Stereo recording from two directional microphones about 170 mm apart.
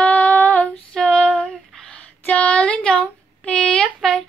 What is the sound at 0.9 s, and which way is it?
Female singing, 5° left (ahead or behind).